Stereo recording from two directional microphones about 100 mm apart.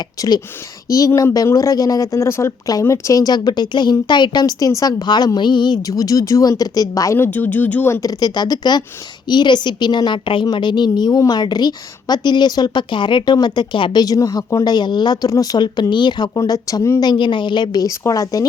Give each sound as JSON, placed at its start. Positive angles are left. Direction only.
{"t": 0.2, "sound": "a woman's voice", "side_deg": 45}
{"t": 5.9, "sound": "speech", "side_deg": 35}
{"t": 7.2, "sound": "speech", "side_deg": 20}
{"t": 8.0, "sound": "a woman's voice", "side_deg": 40}
{"t": 17.0, "sound": "a woman's voice", "side_deg": 50}